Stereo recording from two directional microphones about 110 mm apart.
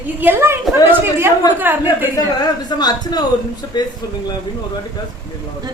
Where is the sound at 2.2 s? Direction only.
40° left (ahead or behind).